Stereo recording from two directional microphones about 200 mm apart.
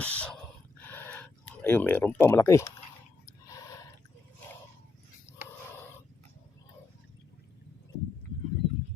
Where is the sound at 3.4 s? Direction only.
15° left (ahead or behind).